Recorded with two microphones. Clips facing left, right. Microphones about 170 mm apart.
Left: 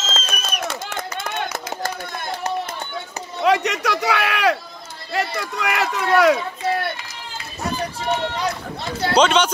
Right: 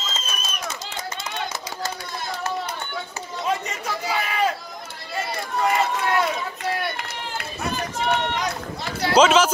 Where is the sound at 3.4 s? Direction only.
75° left (ahead or behind).